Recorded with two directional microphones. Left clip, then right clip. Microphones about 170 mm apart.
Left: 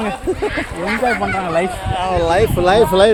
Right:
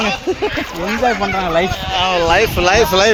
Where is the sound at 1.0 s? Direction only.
65° right (ahead or behind).